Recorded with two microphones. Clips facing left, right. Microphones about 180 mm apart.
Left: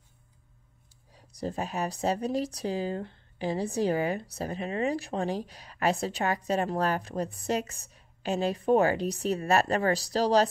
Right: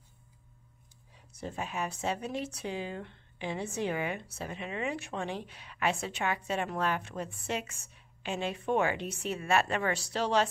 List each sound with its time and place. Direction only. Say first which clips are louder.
1.1 s speech: left 6 dB; 35° left (ahead or behind)